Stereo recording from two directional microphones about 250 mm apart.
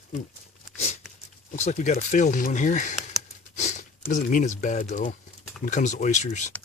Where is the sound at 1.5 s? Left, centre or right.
Left.